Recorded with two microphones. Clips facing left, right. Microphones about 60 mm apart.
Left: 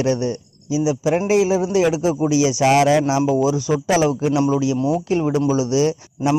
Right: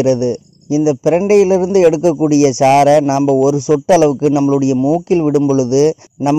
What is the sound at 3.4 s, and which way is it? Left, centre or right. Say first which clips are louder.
Speech: right 7 dB; centre.